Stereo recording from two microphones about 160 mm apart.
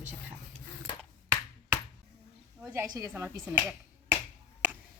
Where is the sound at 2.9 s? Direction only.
15° right (ahead or behind).